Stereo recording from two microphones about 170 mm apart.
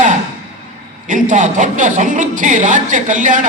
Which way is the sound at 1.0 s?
50° right (ahead or behind).